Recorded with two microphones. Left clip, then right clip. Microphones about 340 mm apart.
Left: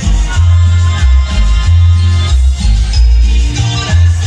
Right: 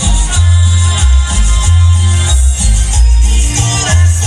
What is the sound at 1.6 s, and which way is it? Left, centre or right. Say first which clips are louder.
Music: right 2 dB; centre.